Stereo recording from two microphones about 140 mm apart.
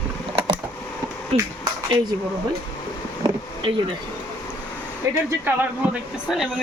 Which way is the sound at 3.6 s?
40° right (ahead or behind).